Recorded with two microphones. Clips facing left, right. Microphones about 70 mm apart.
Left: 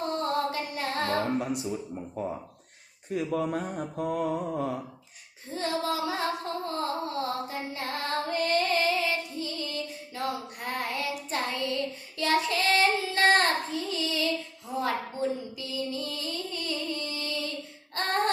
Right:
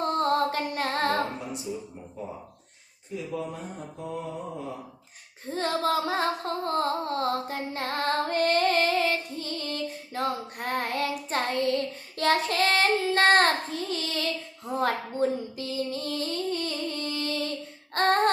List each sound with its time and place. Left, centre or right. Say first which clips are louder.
0.0 s female singing: right 4 dB; right
3.1 s mantra: left 5 dB; left
5.5 s music: right 3 dB; right
14.7 s a sound: right 3 dB; right